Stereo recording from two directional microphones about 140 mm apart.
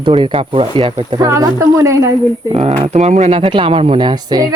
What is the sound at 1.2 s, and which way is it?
Speech, 25° right (ahead or behind).